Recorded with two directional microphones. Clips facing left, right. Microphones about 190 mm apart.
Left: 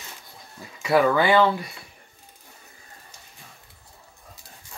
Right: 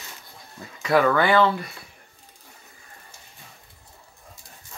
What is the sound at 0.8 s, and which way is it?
Speech, 10° left (ahead or behind).